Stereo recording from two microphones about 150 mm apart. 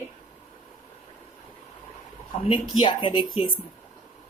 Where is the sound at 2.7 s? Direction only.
35° left (ahead or behind).